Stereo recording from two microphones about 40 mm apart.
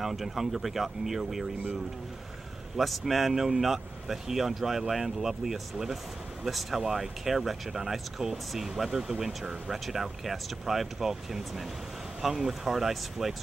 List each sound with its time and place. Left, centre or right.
0.0 s speech: centre
2.8 s speech: centre
9.2 s speech: centre
9.7 s speech: centre